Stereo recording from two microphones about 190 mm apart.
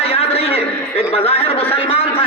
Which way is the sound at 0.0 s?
30° left (ahead or behind).